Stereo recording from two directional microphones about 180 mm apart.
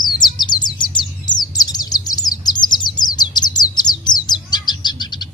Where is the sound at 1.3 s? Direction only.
20° left (ahead or behind).